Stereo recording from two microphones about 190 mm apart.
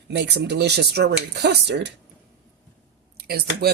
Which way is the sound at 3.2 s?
55° right (ahead or behind).